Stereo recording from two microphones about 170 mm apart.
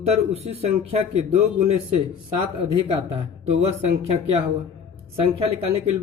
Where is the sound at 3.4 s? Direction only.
40° right (ahead or behind).